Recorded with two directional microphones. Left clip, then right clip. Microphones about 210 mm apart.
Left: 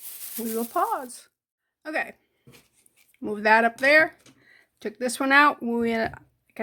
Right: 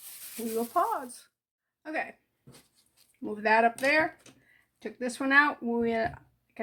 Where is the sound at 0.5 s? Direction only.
40° left (ahead or behind).